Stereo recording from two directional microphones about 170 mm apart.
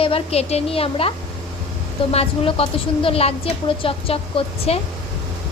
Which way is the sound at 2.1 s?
35° left (ahead or behind).